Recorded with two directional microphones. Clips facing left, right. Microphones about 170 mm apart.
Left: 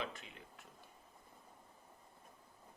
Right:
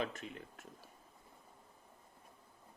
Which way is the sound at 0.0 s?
45° right (ahead or behind).